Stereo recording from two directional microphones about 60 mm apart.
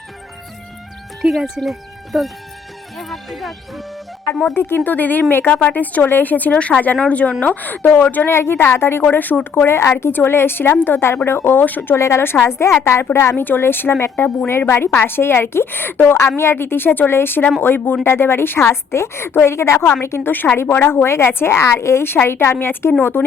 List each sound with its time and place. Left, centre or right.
1.2 s speech: centre
4.5 s speech: left
5.5 s a woman's voice: centre
5.7 s a woman's voice: left
8.3 s speech: left
11.9 s a woman's voice: left
12.2 s a woman's voice: left
13.3 s speech: left
18.0 s a woman's voice: left